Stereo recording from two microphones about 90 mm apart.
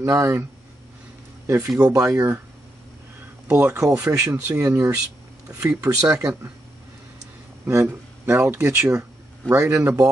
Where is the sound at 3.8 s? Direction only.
40° right (ahead or behind).